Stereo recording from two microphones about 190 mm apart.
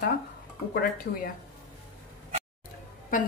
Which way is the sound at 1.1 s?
55° left (ahead or behind).